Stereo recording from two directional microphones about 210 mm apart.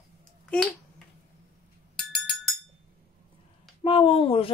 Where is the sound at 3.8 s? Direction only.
25° left (ahead or behind).